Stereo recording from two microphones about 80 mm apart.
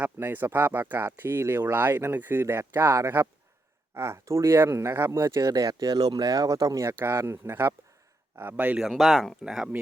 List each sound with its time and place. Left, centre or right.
0.0 s speech: right
6.9 s speech: right
8.8 s speech: centre